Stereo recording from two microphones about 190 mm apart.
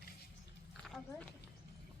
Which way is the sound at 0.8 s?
Centre (ahead or behind).